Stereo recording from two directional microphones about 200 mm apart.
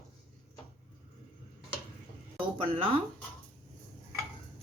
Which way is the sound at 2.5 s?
25° right (ahead or behind).